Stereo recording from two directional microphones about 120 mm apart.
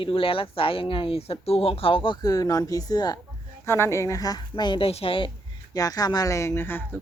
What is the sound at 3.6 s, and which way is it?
A woman's voice, 20° left (ahead or behind).